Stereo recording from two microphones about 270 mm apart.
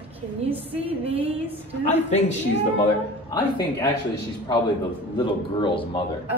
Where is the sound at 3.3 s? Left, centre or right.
Centre.